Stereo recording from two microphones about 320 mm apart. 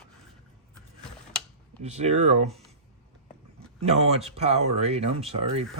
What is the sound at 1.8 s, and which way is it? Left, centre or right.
Speech, centre.